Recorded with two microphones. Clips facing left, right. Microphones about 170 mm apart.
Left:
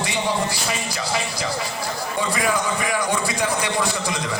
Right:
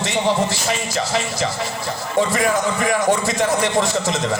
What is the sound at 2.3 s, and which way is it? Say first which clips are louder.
A man's voice: right 4 dB; 45° right (ahead or behind).